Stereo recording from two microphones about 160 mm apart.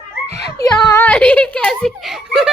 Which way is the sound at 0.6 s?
25° left (ahead or behind).